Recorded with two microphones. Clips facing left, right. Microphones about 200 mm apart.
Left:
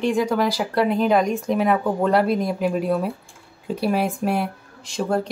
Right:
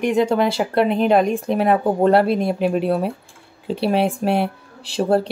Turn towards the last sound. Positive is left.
turn(degrees=-30)  # may be behind; listen again after turning